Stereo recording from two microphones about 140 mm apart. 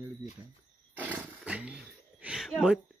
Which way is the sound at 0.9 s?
10° right (ahead or behind).